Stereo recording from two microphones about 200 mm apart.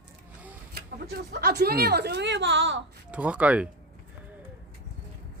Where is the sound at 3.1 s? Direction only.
5° right (ahead or behind).